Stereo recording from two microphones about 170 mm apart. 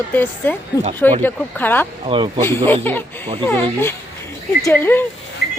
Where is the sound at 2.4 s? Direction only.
15° left (ahead or behind).